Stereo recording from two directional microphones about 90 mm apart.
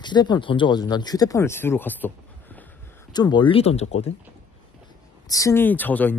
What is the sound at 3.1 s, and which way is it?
Speech, 50° left (ahead or behind).